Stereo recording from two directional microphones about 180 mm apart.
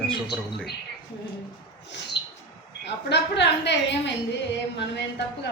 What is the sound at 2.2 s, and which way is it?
Bird, 70° left (ahead or behind).